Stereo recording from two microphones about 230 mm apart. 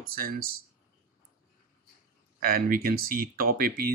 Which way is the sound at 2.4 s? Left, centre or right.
Right.